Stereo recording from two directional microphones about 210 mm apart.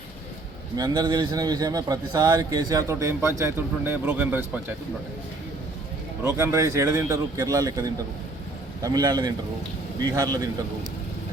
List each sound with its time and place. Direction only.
0.8 s a man's voice: 15° right (ahead or behind)
6.3 s a man's voice: 10° right (ahead or behind)